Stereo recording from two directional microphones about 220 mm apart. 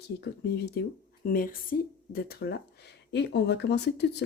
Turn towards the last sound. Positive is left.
turn(degrees=50)  # may be behind; listen again after turning